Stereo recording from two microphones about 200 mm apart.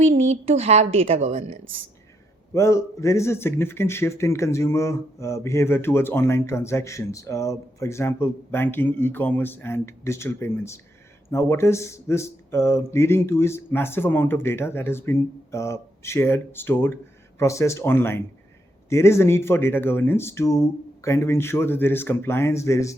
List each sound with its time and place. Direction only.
0.0 s a woman's voice: 35° right (ahead or behind)
2.5 s a man's voice: 15° left (ahead or behind)